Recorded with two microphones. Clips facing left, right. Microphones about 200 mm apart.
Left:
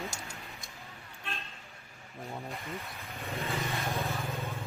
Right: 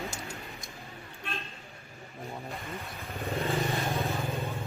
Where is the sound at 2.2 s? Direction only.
Centre (ahead or behind).